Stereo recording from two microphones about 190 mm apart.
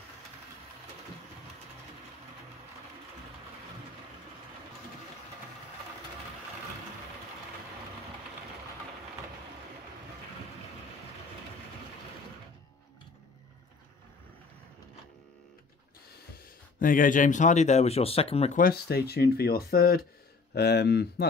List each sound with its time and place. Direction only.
16.8 s speech: 45° left (ahead or behind)
18.6 s speech: 55° left (ahead or behind)